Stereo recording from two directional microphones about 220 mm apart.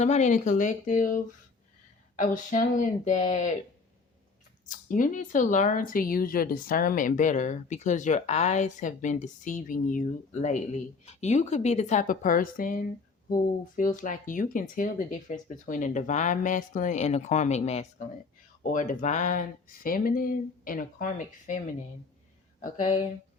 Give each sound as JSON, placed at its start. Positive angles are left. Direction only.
{"t": 0.0, "sound": "speech", "side_deg": 30}
{"t": 2.2, "sound": "speech", "side_deg": 35}
{"t": 4.9, "sound": "speech", "side_deg": 35}